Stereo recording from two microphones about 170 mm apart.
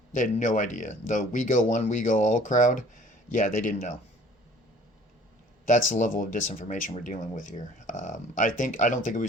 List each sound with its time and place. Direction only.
0.1 s speech: 45° left (ahead or behind)
5.6 s speech: 50° left (ahead or behind)